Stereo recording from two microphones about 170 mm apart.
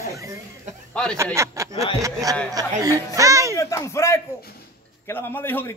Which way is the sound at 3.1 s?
20° right (ahead or behind).